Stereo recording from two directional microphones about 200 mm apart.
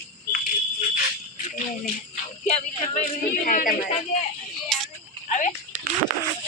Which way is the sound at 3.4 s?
45° left (ahead or behind).